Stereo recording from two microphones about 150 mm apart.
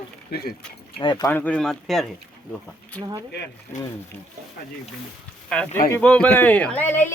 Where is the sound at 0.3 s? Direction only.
90° left.